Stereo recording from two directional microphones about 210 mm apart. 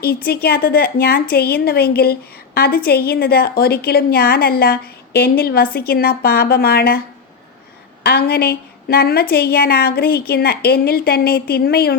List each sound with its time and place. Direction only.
0.0 s a woman's voice: 45° left (ahead or behind)
8.0 s a woman's voice: 50° left (ahead or behind)